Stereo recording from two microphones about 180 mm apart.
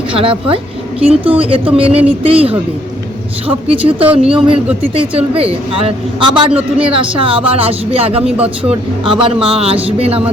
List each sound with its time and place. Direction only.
0.1 s speech: 30° right (ahead or behind)
4.0 s speech: 5° right (ahead or behind)
4.4 s speech: 30° right (ahead or behind)
6.5 s speech: 5° right (ahead or behind)
6.9 s speech: 30° right (ahead or behind)
8.2 s speech: 5° right (ahead or behind)
8.7 s speech: 30° right (ahead or behind)